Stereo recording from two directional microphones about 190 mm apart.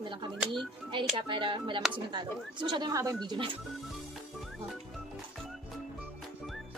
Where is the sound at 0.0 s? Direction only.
25° right (ahead or behind).